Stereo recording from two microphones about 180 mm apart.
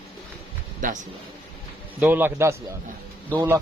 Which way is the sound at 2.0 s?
10° right (ahead or behind).